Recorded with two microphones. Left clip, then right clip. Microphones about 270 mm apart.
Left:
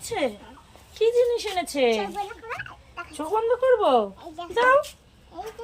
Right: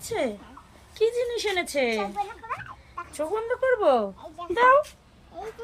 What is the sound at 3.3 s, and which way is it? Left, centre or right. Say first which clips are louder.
Speech: left 5 dB; right.